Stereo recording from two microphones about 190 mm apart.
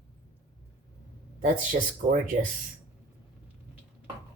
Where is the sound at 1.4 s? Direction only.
45° right (ahead or behind).